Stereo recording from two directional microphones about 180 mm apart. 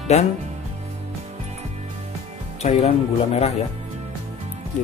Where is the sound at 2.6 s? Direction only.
35° left (ahead or behind).